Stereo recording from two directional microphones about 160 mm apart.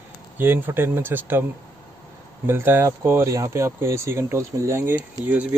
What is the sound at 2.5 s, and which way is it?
Speech, 15° right (ahead or behind).